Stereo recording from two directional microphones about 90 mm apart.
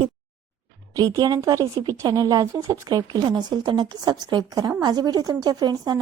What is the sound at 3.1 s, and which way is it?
Speech, 55° right (ahead or behind).